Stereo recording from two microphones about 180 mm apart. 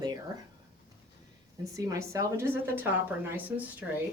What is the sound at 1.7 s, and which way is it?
A woman's voice, 20° right (ahead or behind).